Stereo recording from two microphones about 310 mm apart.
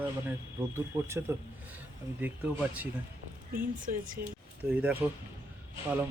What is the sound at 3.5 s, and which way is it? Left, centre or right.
Speech, right.